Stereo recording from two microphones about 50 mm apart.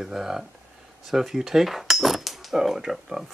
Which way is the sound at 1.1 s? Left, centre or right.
Centre.